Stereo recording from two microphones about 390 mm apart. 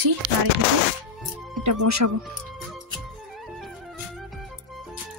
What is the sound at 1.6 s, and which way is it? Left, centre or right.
Speech, right.